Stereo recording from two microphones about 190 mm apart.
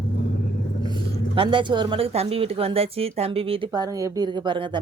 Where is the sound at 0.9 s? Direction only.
25° right (ahead or behind).